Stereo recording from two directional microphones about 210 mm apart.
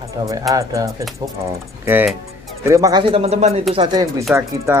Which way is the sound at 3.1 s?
30° right (ahead or behind).